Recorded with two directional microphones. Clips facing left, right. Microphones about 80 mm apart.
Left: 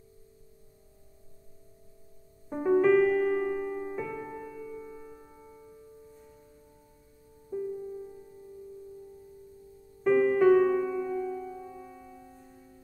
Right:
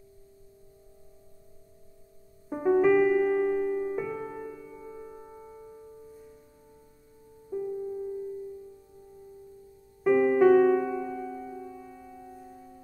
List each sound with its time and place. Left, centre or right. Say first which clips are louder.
2.5 s music: right 1 dB; centre; by 5.9 s right
7.5 s music: right 1 dB; centre
10.0 s music: right 1 dB; centre